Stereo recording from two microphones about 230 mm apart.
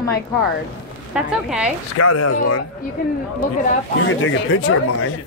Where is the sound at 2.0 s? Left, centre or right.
Left.